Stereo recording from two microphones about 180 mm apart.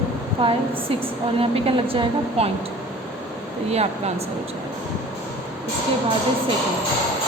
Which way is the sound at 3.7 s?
35° right (ahead or behind).